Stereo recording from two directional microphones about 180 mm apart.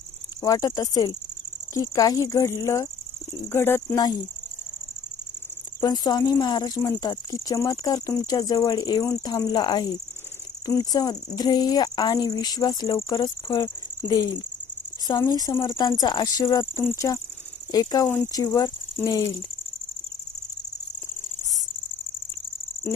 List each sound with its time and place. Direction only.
0.4 s speech: 20° left (ahead or behind)
5.8 s speech: 20° left (ahead or behind)
15.2 s speech: 20° left (ahead or behind)